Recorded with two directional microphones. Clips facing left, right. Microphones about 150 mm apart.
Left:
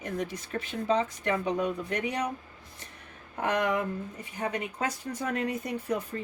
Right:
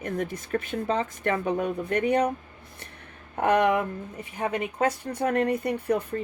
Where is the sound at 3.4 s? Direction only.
55° right (ahead or behind).